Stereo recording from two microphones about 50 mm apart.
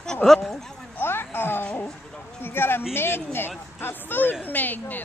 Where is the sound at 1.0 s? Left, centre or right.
Left.